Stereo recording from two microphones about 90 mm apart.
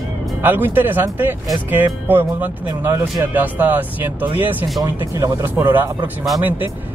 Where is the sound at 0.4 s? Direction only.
20° right (ahead or behind).